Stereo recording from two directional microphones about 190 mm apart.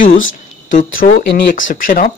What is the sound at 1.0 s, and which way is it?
Speech, 55° left (ahead or behind).